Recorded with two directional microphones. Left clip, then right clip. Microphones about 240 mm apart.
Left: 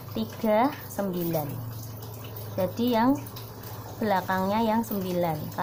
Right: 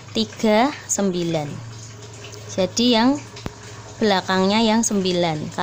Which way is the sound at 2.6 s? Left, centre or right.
Right.